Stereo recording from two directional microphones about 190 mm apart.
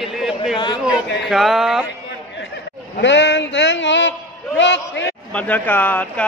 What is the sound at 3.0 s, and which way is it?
A man's voice, 70° left (ahead or behind).